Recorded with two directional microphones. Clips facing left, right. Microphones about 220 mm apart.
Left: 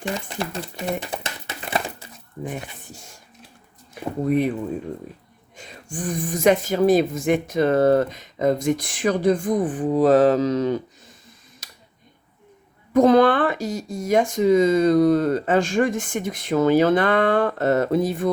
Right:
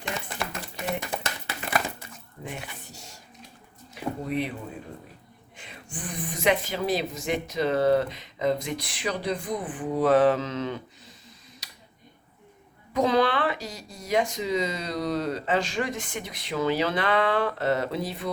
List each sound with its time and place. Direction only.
0.0 s speech: 30° left (ahead or behind)
2.4 s a sound: 50° left (ahead or behind)
5.5 s speech: 45° left (ahead or behind)
11.6 s finger snapping: 50° left (ahead or behind)
12.9 s speech: 50° left (ahead or behind)